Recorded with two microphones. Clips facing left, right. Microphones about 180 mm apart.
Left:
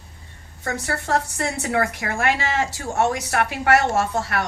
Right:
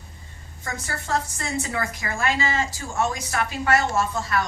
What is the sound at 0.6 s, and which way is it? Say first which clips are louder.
A woman's voice: left 6 dB; 65° left (ahead or behind).